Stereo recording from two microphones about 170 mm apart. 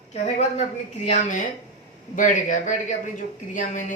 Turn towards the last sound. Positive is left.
turn(degrees=50)  # may be behind; listen again after turning